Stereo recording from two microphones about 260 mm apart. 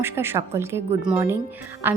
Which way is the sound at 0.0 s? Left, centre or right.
Centre.